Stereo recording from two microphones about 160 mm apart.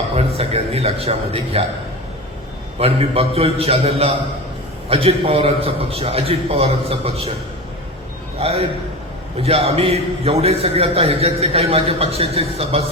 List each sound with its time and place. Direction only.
0.1 s a man's voice: 40° right (ahead or behind)
2.7 s a man's voice: 40° right (ahead or behind)
8.4 s a man's voice: 40° right (ahead or behind)